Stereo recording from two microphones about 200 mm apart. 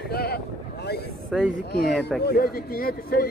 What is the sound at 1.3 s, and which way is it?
Speech, centre (ahead or behind).